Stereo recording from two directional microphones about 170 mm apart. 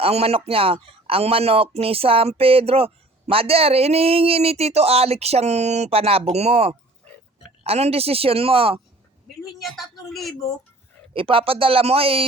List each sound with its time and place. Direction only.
0.0 s speech: 35° right (ahead or behind)
9.4 s a woman's voice: centre (ahead or behind)
11.1 s speech: 30° right (ahead or behind)